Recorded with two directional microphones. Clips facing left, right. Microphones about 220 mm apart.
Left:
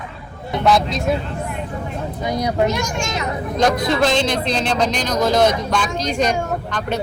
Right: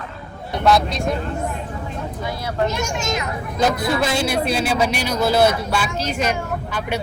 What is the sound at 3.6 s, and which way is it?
Speech, 5° right (ahead or behind).